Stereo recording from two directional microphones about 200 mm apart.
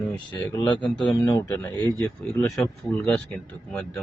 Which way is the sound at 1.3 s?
10° left (ahead or behind).